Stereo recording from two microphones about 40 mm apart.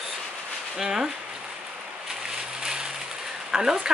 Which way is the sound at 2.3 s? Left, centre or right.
Centre.